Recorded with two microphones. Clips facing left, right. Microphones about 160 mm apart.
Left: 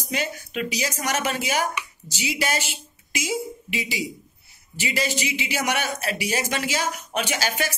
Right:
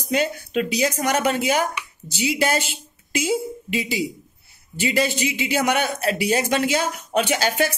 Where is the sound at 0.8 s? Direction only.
55° right (ahead or behind).